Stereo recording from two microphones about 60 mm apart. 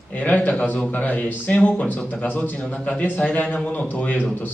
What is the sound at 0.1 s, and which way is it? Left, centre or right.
Speech, left.